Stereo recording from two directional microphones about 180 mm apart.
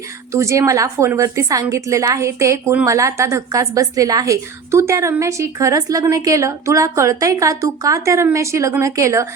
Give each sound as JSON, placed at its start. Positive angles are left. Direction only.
{"t": 0.3, "sound": "a woman's voice", "side_deg": -15}